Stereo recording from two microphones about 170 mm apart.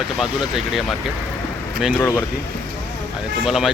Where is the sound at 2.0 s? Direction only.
10° left (ahead or behind).